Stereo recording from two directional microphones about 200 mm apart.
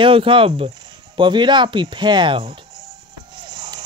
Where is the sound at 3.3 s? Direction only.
25° right (ahead or behind).